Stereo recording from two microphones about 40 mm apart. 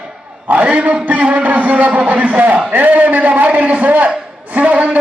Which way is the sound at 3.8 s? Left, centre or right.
Right.